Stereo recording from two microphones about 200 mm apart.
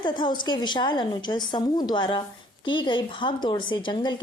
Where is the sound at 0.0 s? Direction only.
20° left (ahead or behind).